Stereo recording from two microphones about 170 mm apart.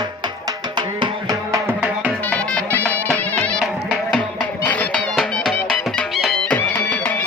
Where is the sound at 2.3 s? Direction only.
5° left (ahead or behind).